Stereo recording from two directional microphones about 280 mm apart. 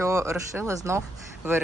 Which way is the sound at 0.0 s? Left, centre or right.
Centre.